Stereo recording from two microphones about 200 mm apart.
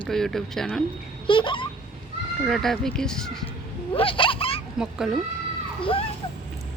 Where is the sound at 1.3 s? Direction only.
25° left (ahead or behind).